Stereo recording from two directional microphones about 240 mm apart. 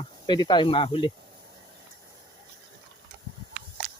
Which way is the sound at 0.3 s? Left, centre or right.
Centre.